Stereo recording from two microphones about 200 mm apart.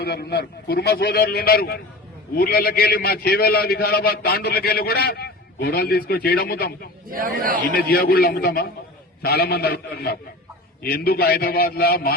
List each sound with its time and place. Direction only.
0.0 s a man's voice: 55° left (ahead or behind)
7.1 s a man's voice: 45° right (ahead or behind)
7.8 s a man's voice: 50° left (ahead or behind)